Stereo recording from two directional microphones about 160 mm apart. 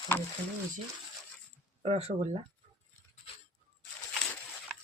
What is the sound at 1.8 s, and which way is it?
Speech, 40° right (ahead or behind).